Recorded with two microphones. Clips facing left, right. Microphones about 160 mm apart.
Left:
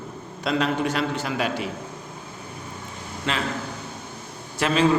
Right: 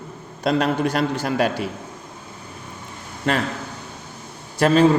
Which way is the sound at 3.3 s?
45° right (ahead or behind).